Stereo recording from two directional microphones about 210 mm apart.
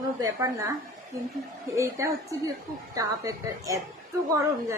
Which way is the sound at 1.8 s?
15° right (ahead or behind).